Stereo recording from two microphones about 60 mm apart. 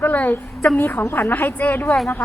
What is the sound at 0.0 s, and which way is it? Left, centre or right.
A woman's voice, left.